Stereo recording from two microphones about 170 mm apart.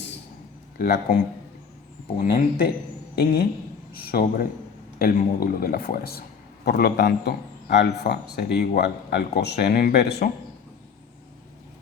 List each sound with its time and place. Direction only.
0.8 s a man's voice: 65° left (ahead or behind)
3.9 s a man's voice: 60° left (ahead or behind)